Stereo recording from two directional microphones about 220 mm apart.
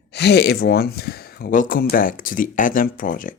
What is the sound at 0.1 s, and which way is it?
Speech, 50° left (ahead or behind).